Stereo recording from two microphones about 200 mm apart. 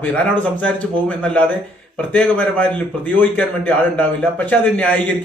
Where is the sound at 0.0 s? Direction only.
10° left (ahead or behind).